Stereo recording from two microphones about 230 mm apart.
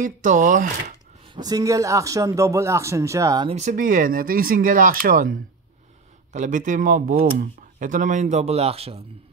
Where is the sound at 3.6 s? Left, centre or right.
Right.